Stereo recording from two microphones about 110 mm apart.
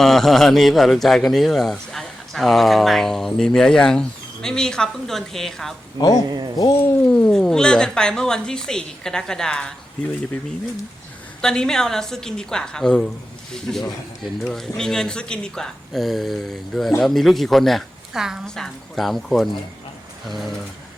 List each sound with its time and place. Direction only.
0.0 s a man's voice: centre (ahead or behind)
6.2 s speech: 40° right (ahead or behind)
7.0 s a man's voice: 10° left (ahead or behind)
11.3 s a man's voice: 5° left (ahead or behind)